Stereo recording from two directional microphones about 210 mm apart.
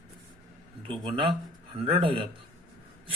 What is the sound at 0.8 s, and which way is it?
A man's voice, 25° right (ahead or behind).